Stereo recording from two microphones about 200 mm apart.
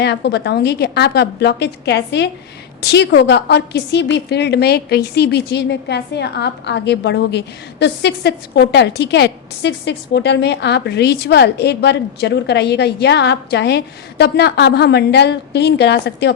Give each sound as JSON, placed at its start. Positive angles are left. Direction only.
{"t": 0.0, "sound": "a woman's voice", "side_deg": 60}